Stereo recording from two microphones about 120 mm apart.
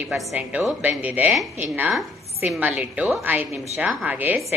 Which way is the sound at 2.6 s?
15° right (ahead or behind).